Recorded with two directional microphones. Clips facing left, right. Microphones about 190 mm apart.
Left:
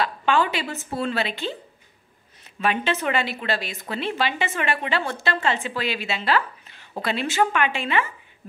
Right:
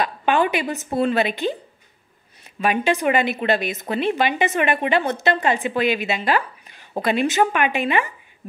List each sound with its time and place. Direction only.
0.0 s speech: 15° right (ahead or behind)
2.6 s a woman's voice: 10° right (ahead or behind)